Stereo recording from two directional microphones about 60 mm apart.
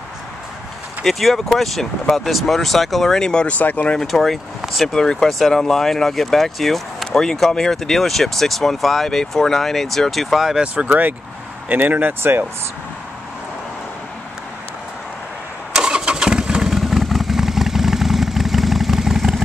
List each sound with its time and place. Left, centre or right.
1.0 s speech: centre
3.5 s speech: left
3.9 s speech: centre
4.9 s speech: centre
10.6 s speech: centre; by 12.4 s right
15.7 s vehicle: centre